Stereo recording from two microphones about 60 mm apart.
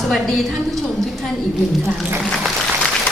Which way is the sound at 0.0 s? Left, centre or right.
Centre.